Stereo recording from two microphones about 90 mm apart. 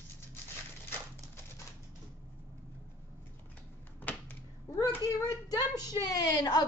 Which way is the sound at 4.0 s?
20° left (ahead or behind).